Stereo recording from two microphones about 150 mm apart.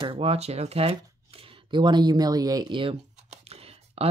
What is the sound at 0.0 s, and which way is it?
Speech, 40° right (ahead or behind).